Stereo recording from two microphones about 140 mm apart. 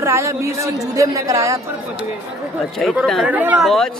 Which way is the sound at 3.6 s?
Centre (ahead or behind).